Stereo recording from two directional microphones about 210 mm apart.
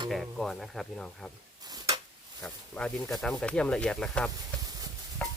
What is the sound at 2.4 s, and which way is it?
Speech, 5° left (ahead or behind).